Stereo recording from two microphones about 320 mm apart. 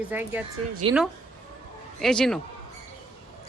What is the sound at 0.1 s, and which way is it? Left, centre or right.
Speech, centre.